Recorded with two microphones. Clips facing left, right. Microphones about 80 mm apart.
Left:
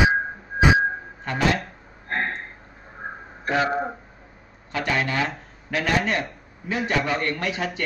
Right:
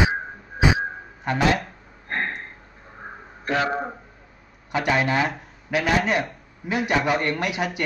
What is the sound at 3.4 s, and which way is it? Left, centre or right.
Speech, centre.